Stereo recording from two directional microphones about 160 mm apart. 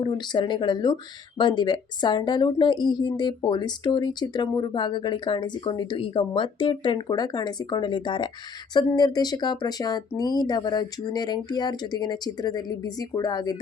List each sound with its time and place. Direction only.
0.0 s a woman's voice: 30° left (ahead or behind)